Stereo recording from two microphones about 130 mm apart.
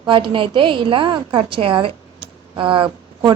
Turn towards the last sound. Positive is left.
turn(degrees=-40)  # may be behind; listen again after turning